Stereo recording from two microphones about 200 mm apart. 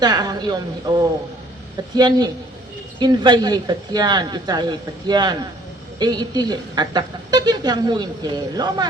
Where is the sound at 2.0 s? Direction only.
20° right (ahead or behind).